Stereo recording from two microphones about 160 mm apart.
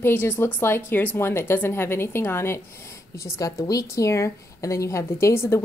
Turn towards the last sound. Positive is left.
turn(degrees=15)  # may be behind; listen again after turning